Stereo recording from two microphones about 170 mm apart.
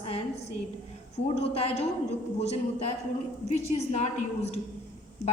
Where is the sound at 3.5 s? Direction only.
40° left (ahead or behind).